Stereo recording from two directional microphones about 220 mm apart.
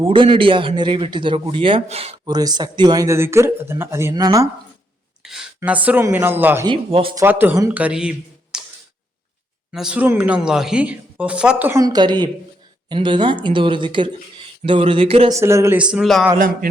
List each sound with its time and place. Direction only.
0.0 s a man's voice: 25° right (ahead or behind)
5.2 s speech: centre (ahead or behind)
6.7 s a man's voice: 25° right (ahead or behind)
7.3 s speech: 10° right (ahead or behind)
8.5 s camera: 5° right (ahead or behind)
9.7 s a man's voice: 5° right (ahead or behind); by 15.3 s 25° right (ahead or behind)
15.3 s speech: 15° right (ahead or behind)